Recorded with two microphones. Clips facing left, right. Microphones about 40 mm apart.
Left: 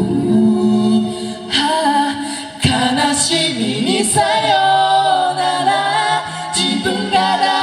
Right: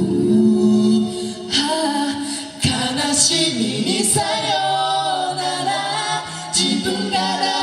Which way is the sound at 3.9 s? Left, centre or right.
Left.